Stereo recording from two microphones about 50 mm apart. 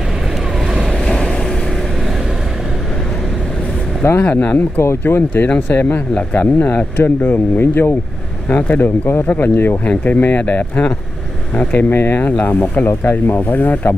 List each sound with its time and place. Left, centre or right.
1.0 s vehicle: centre
4.0 s speech: left
4.3 s speech: left
4.7 s speech: left
6.1 s speech: left
9.8 s speech: left
11.9 s speech: left
12.2 s speech: left
12.8 s speech: left